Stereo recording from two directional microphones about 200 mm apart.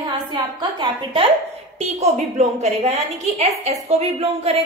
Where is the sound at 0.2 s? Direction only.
20° right (ahead or behind).